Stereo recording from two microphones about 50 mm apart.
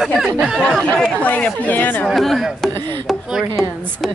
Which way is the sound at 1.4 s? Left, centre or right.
Left.